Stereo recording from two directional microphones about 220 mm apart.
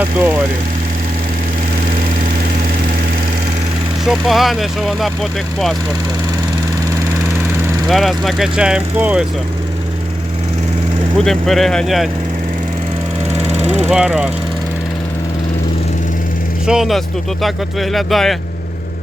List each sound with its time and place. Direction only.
4.0 s speech: centre (ahead or behind)
7.9 s speech: centre (ahead or behind)
11.2 s speech: centre (ahead or behind)
13.3 s vehicle: 30° right (ahead or behind)
13.9 s speech: 5° right (ahead or behind)
16.6 s speech: centre (ahead or behind)